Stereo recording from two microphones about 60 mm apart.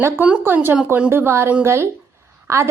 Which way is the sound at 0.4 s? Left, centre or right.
Right.